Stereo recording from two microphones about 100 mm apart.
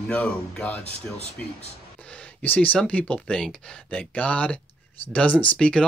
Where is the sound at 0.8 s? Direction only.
90° left.